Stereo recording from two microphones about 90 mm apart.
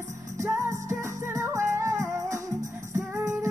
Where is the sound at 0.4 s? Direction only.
35° right (ahead or behind).